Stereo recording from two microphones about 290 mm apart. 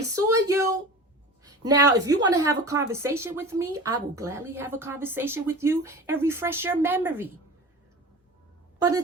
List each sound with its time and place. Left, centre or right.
0.3 s speech: centre